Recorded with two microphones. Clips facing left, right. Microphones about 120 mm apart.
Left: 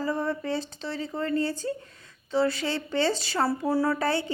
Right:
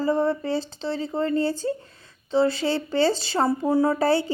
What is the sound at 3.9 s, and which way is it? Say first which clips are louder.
Speech: right 6 dB; 30° right (ahead or behind).